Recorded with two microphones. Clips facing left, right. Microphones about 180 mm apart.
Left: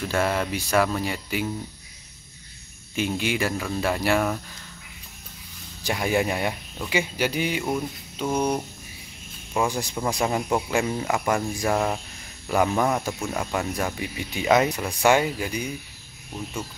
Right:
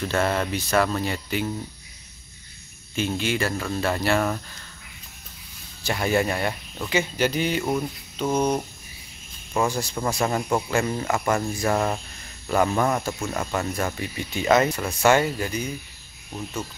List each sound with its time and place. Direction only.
0.0 s speech: 10° left (ahead or behind)
3.0 s speech: 15° left (ahead or behind)
5.9 s speech: 15° left (ahead or behind)
7.6 s speech: centre (ahead or behind)
9.7 s speech: 15° left (ahead or behind)